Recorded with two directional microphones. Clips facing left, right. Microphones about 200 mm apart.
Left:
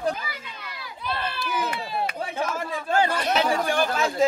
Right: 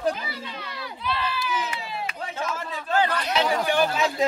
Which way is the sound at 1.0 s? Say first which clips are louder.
Right 1 dB; 50° left (ahead or behind).